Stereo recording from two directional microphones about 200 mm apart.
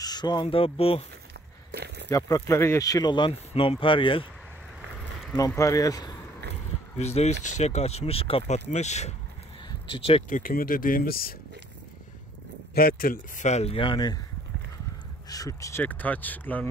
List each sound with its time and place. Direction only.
0.0 s speech: 20° left (ahead or behind)
1.7 s a sound: 55° right (ahead or behind)
2.0 s speech: 15° left (ahead or behind)
5.3 s speech: 15° left (ahead or behind)
7.0 s speech: 30° left (ahead or behind)
10.4 s speech: 45° left (ahead or behind)
12.7 s speech: 45° left (ahead or behind); by 14.2 s 20° left (ahead or behind)
15.2 s speech: 20° left (ahead or behind)